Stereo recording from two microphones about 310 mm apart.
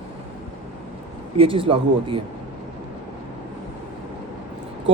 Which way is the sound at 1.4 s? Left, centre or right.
Centre.